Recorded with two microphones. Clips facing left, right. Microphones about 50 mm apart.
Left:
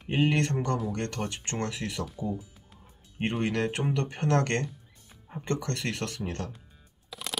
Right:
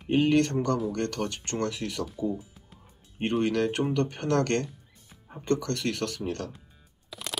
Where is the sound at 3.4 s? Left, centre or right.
Left.